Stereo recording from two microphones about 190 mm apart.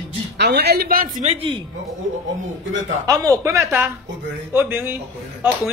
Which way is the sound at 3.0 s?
20° right (ahead or behind).